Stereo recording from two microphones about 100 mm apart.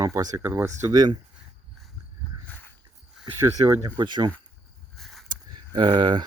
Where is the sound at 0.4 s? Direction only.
25° right (ahead or behind).